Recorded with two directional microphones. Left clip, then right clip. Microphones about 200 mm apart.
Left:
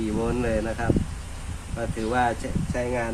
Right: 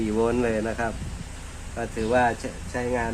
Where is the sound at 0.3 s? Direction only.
35° right (ahead or behind).